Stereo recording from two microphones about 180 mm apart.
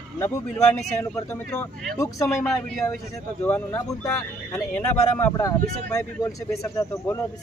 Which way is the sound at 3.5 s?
15° left (ahead or behind).